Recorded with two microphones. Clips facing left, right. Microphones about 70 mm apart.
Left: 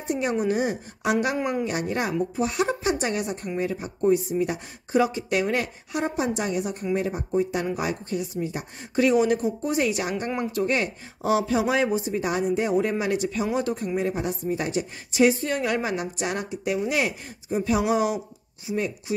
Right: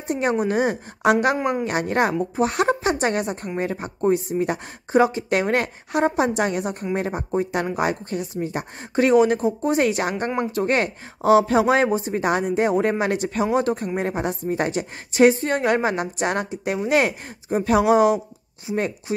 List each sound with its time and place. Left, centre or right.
0.1 s speech: right
10.3 s speech: right
10.6 s speech: right
18.7 s speech: right
19.1 s speech: right